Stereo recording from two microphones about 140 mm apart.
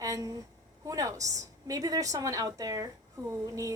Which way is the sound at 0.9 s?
25° right (ahead or behind).